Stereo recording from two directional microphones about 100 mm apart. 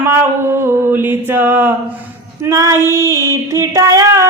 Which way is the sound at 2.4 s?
30° right (ahead or behind).